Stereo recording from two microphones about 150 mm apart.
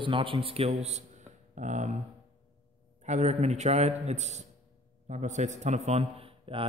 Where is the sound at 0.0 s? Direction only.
35° right (ahead or behind); by 2.0 s 50° right (ahead or behind).